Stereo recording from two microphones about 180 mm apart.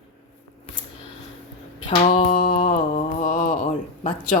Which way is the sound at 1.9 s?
30° left (ahead or behind).